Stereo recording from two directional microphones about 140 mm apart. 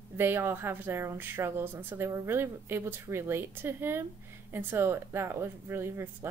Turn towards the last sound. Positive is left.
turn(degrees=-15)  # may be behind; listen again after turning